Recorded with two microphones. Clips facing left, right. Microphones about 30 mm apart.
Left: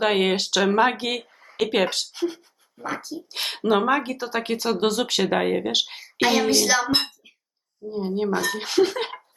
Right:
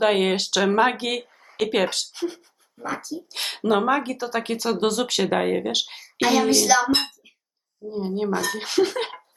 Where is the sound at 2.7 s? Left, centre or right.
Centre.